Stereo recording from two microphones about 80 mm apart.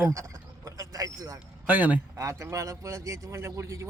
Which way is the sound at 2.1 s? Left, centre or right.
Right.